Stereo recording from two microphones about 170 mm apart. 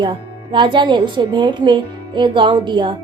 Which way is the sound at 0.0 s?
30° right (ahead or behind).